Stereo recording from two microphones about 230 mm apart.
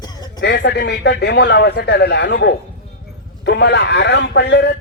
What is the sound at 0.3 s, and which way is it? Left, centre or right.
A man's voice, left.